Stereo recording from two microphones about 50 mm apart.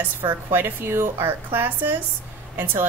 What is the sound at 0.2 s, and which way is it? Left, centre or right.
Speech, right.